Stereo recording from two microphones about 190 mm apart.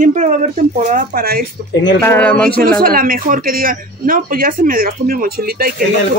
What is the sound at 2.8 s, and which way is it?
Speech, 50° right (ahead or behind).